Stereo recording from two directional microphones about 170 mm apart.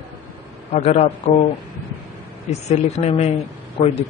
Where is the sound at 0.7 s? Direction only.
40° left (ahead or behind).